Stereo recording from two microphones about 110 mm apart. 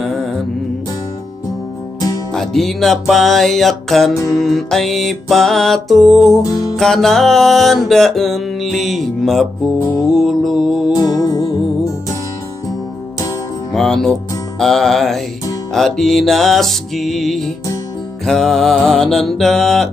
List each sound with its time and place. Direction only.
0.0 s music: centre (ahead or behind)
2.3 s music: 5° left (ahead or behind)
6.3 s music: 35° left (ahead or behind)
6.8 s music: 5° left (ahead or behind)
11.0 s music: 35° left (ahead or behind)
13.7 s music: 5° left (ahead or behind)